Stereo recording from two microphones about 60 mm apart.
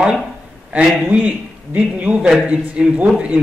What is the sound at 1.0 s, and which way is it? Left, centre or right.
A man's voice, right.